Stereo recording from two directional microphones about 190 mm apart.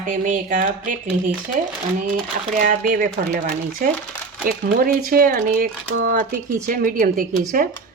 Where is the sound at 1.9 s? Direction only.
45° right (ahead or behind).